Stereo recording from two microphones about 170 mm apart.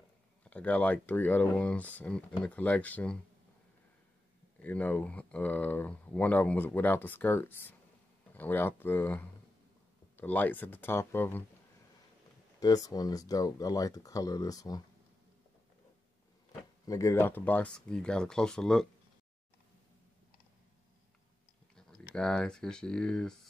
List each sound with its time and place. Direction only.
0.5 s speech: 10° left (ahead or behind)
4.6 s speech: 10° left (ahead or behind)
12.5 s speech: 20° left (ahead or behind)
16.8 s speech: 20° left (ahead or behind); by 18.9 s 5° left (ahead or behind)
21.7 s speech: 5° left (ahead or behind)